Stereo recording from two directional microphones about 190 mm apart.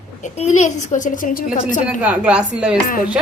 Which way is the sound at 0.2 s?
40° left (ahead or behind).